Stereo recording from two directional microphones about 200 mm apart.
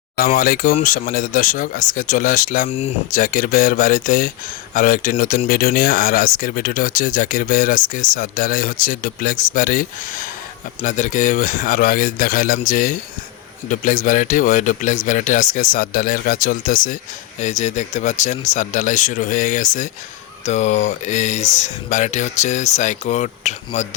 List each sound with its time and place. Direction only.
0.2 s speech: 45° left (ahead or behind)
2.6 s speech: 30° left (ahead or behind)
3.1 s speech: 40° left (ahead or behind)